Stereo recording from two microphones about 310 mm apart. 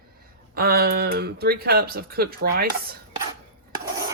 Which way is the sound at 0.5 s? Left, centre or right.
Right.